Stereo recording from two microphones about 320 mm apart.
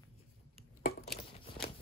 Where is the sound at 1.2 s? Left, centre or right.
Centre.